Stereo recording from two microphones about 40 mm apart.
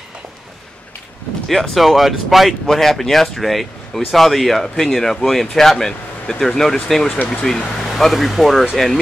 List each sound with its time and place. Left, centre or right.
1.5 s speech: centre
7.1 s speech: left
8.0 s speech: centre